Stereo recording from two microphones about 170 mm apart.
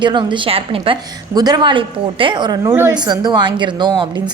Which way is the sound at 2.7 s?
15° right (ahead or behind).